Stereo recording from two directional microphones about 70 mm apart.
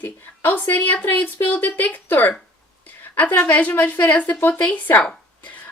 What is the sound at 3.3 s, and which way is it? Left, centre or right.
A woman's voice, left.